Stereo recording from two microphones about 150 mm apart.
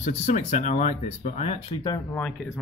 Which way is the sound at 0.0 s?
55° left (ahead or behind).